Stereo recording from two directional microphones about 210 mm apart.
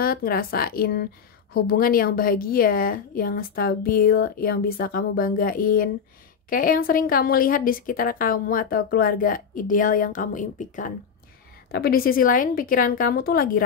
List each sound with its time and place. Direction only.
0.0 s a woman's voice: 45° left (ahead or behind)